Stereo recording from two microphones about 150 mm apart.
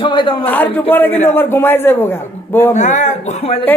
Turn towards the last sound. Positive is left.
turn(degrees=40)  # may be behind; listen again after turning